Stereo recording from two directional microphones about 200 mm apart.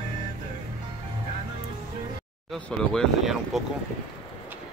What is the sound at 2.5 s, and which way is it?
Speech, centre (ahead or behind).